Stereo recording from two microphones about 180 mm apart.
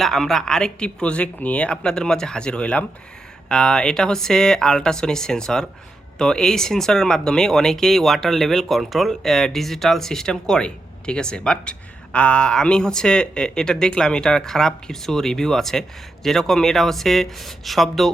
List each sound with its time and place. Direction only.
0.0 s speech: centre (ahead or behind)